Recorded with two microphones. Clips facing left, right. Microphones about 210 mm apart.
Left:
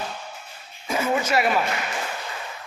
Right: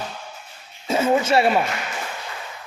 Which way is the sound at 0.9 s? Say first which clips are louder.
Right 5 dB; 25° right (ahead or behind).